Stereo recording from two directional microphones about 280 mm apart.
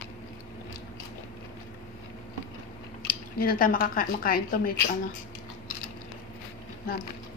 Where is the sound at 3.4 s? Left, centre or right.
Left.